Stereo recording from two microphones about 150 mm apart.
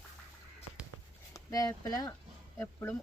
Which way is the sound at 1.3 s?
25° left (ahead or behind).